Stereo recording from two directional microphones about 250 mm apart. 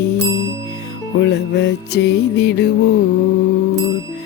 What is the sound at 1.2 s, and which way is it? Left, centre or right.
Music, left.